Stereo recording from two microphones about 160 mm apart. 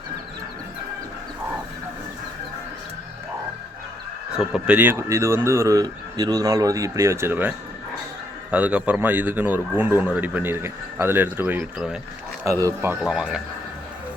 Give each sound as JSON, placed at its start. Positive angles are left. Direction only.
{"t": 4.4, "sound": "speech", "side_deg": -5}
{"t": 12.4, "sound": "speech", "side_deg": -20}
{"t": 13.0, "sound": "speech", "side_deg": -5}